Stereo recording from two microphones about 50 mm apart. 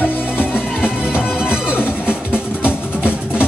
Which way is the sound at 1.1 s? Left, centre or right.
Centre.